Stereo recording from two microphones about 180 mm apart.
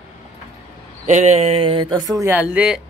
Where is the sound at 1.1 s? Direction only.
40° right (ahead or behind); by 2.8 s 5° right (ahead or behind).